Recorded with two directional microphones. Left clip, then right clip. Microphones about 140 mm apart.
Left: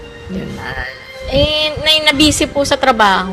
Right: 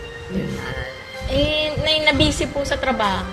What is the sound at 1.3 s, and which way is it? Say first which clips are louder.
A woman's voice: left 6 dB; 15° right (ahead or behind).